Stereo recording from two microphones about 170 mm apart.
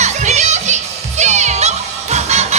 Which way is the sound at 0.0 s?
45° right (ahead or behind).